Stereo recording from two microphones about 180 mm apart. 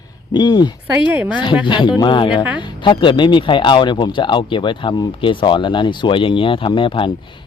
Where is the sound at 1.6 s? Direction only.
25° left (ahead or behind).